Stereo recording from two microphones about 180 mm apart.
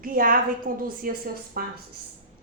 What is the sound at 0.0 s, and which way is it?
A woman's voice, 50° right (ahead or behind).